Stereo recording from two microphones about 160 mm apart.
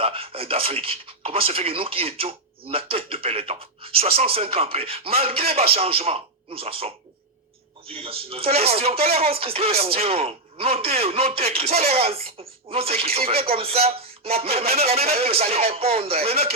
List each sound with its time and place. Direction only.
0.0 s speech: 35° right (ahead or behind)